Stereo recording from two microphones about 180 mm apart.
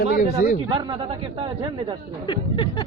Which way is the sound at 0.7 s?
25° right (ahead or behind).